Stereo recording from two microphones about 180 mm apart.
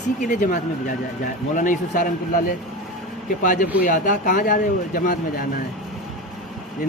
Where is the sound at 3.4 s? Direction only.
45° left (ahead or behind).